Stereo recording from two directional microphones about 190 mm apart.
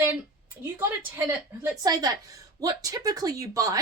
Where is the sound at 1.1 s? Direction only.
10° right (ahead or behind).